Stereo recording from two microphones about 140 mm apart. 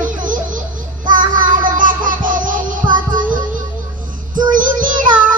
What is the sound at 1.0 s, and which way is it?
Child singing, 70° right (ahead or behind).